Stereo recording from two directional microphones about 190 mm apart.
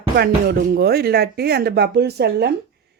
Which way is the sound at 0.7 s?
55° right (ahead or behind).